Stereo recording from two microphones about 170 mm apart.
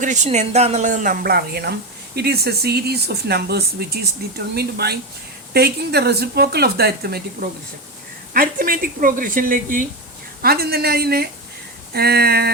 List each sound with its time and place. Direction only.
0.0 s speech: 45° right (ahead or behind)
10.4 s speech: 65° right (ahead or behind)